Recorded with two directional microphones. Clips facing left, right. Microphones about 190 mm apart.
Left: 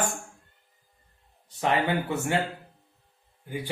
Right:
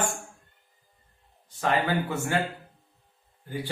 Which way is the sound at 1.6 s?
20° left (ahead or behind).